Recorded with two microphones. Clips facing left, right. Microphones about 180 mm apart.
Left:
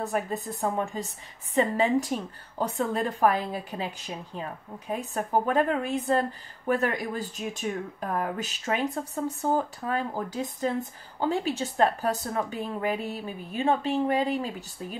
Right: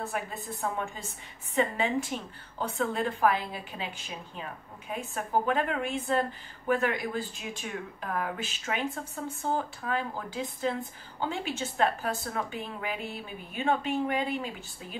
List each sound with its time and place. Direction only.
0.0 s speech: 40° left (ahead or behind)